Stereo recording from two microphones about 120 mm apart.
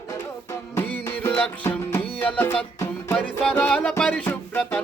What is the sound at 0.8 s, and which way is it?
Music, 15° left (ahead or behind).